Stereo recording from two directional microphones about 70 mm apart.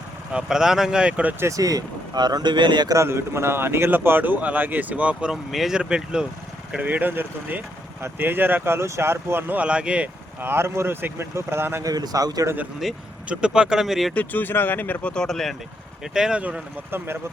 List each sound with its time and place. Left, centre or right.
0.3 s speech: centre
1.4 s speech: right
2.9 s speech: right
5.3 s speech: centre; by 9.4 s right
9.5 s speech: centre
10.4 s speech: right
11.8 s speech: right
12.8 s speech: centre
13.2 s speech: centre
14.1 s speech: left
15.1 s speech: centre
16.1 s speech: centre